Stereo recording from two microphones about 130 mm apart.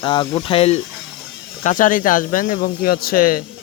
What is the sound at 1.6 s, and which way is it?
Speech, 80° left.